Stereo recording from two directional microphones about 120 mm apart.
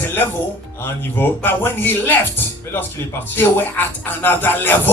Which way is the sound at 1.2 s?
15° left (ahead or behind).